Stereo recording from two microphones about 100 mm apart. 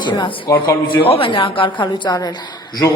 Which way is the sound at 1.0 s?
60° left (ahead or behind).